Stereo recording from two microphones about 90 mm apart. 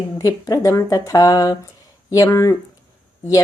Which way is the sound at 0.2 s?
40° left (ahead or behind).